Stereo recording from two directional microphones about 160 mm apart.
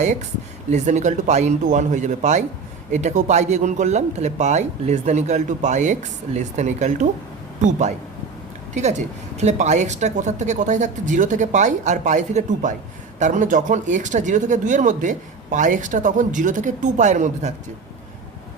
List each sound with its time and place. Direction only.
0.7 s speech: 45° right (ahead or behind)